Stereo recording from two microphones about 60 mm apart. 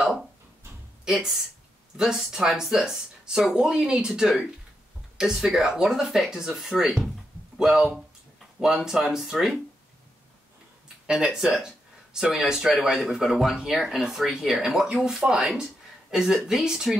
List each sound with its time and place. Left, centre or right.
1.0 s speech: centre
11.1 s speech: centre